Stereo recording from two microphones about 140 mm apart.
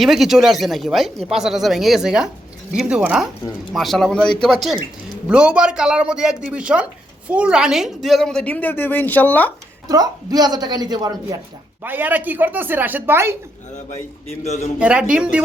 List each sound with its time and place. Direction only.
0.0 s a woman's voice: centre (ahead or behind)
9.8 s speech: 25° right (ahead or behind)
11.8 s speech: 15° right (ahead or behind)
14.3 s a man's voice: 55° left (ahead or behind)
14.8 s speech: 10° right (ahead or behind)